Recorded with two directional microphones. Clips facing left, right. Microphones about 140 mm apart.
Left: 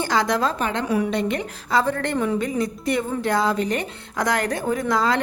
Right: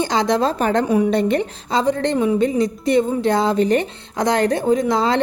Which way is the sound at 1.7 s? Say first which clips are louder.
Right 3 dB; 20° right (ahead or behind).